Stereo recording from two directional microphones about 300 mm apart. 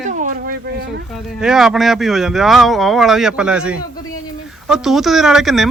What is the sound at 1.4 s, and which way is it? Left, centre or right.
Speech, centre.